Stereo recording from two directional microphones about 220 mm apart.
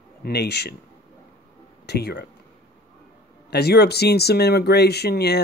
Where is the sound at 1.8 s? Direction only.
50° left (ahead or behind).